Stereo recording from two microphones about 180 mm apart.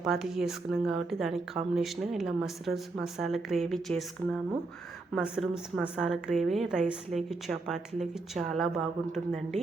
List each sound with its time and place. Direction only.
0.0 s speech: centre (ahead or behind)